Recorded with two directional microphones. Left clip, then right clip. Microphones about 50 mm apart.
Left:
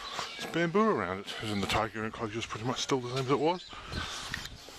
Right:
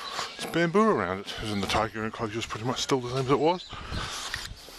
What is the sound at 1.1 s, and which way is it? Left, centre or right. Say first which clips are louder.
Speech: right 3 dB; right.